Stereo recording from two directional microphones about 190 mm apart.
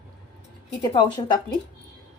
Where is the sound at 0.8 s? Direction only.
25° left (ahead or behind).